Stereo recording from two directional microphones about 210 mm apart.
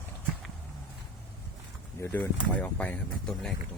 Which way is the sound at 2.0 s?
10° left (ahead or behind).